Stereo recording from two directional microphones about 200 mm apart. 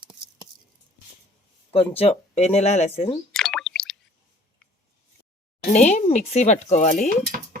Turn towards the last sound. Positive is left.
turn(degrees=35)  # may be behind; listen again after turning